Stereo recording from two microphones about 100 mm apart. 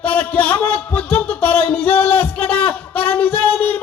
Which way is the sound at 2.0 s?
15° left (ahead or behind).